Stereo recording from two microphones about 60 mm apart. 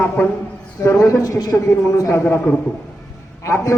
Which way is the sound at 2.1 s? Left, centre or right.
Left.